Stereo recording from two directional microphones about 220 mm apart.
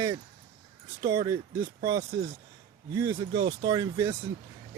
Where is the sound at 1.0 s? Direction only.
20° right (ahead or behind).